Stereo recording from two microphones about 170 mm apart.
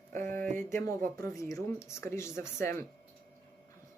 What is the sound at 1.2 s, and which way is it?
Speech, 20° left (ahead or behind).